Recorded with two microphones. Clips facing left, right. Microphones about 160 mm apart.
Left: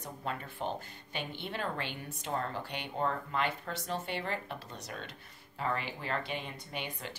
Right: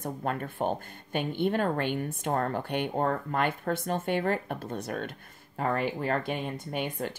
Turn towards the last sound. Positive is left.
turn(degrees=-50)  # may be behind; listen again after turning